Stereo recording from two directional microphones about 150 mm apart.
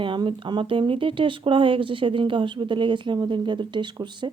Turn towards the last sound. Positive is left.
turn(degrees=-30)  # may be behind; listen again after turning